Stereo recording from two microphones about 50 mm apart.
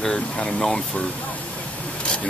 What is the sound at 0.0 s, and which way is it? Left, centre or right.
Speech, centre.